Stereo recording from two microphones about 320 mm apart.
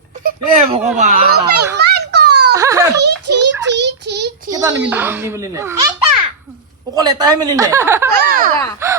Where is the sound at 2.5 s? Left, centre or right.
Centre.